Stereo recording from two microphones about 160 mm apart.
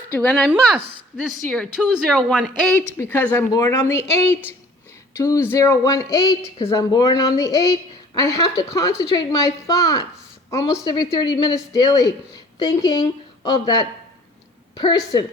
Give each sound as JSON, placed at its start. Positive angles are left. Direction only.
{"t": 0.2, "sound": "a woman's voice", "side_deg": 5}
{"t": 3.0, "sound": "speech", "side_deg": 15}
{"t": 5.1, "sound": "a woman's voice", "side_deg": 20}